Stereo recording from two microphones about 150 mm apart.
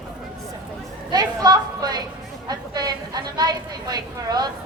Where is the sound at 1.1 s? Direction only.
25° right (ahead or behind).